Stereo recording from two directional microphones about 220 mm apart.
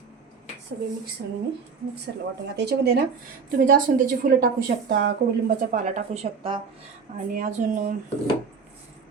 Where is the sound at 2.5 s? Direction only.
50° right (ahead or behind).